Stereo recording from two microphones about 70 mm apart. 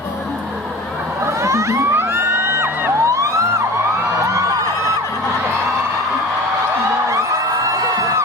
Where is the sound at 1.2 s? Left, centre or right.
Right.